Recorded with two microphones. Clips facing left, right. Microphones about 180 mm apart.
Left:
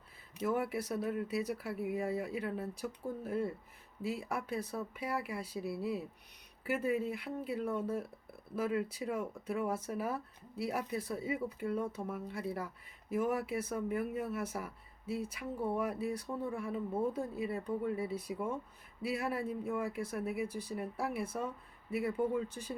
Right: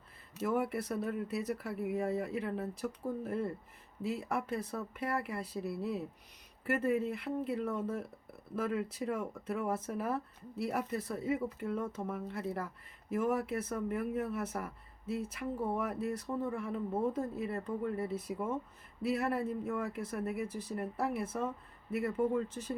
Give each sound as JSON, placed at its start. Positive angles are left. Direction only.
{"t": 0.4, "sound": "speech", "side_deg": 5}